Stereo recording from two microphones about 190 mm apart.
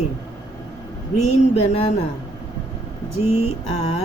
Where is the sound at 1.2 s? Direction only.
35° left (ahead or behind).